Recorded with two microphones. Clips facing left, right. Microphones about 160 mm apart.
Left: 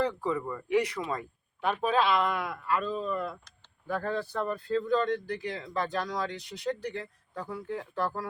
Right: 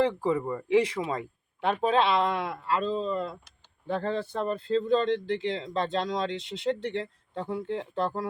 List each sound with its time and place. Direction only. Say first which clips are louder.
0.0 s speech: right 4 dB; 25° right (ahead or behind)